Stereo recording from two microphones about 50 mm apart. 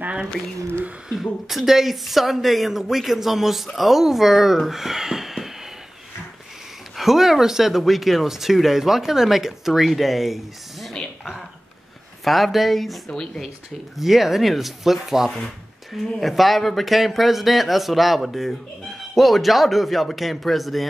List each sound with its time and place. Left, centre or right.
1.0 s speech: centre
7.0 s speech: centre
12.3 s speech: centre
13.1 s speech: centre
13.9 s speech: centre